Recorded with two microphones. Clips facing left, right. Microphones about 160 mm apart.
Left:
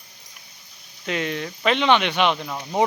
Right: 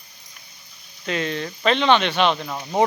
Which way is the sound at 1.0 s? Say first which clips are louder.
Right 1 dB; 15° left (ahead or behind).